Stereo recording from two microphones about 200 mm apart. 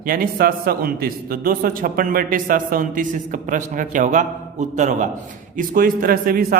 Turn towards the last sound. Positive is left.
turn(degrees=-45)  # may be behind; listen again after turning